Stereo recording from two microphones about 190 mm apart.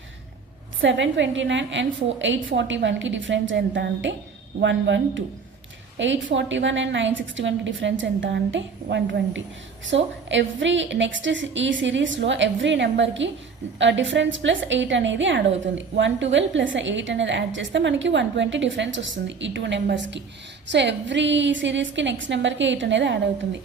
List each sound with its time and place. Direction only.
0.8 s a woman's voice: 75° right (ahead or behind)